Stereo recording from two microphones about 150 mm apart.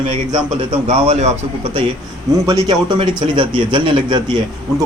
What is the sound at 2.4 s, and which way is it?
A man's voice, 25° right (ahead or behind).